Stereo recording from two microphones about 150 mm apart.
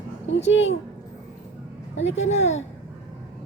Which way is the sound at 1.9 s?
50° left (ahead or behind).